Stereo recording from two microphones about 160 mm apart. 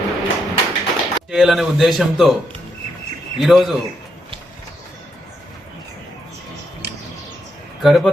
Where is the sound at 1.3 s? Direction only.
Centre (ahead or behind).